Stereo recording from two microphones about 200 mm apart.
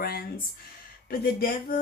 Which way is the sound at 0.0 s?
50° left (ahead or behind).